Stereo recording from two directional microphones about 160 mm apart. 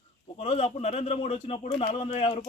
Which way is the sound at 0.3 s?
40° left (ahead or behind).